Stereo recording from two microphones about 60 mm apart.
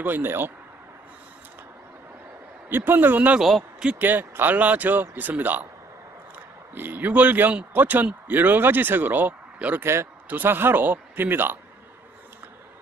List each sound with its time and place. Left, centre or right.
0.0 s speech: right
2.7 s speech: right
3.3 s speech: centre
4.0 s a man's voice: right
6.7 s a man's voice: right